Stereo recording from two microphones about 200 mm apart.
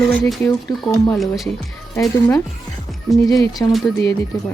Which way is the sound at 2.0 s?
10° left (ahead or behind).